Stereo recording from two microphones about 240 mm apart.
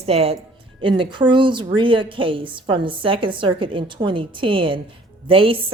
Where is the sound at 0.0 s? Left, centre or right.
Right.